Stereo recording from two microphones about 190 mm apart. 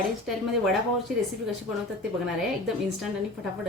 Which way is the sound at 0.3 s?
Centre (ahead or behind).